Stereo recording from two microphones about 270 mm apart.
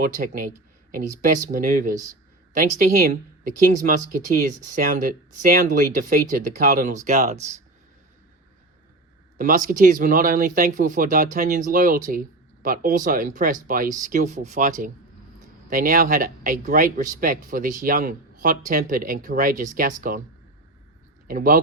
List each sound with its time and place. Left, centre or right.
0.0 s speech: right
9.4 s speech: right
21.2 s speech: right